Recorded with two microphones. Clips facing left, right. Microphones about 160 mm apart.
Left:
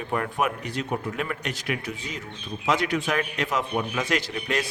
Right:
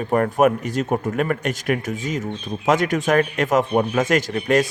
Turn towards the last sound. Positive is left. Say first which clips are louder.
# right 9 dB
turn(degrees=-50)  # may be behind; listen again after turning